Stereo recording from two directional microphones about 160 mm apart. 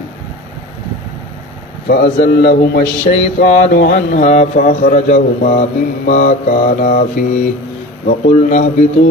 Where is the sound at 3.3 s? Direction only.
75° left (ahead or behind); by 7.2 s 60° left (ahead or behind).